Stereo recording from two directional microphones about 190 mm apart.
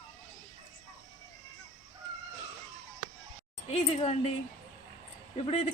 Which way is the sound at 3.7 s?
35° left (ahead or behind).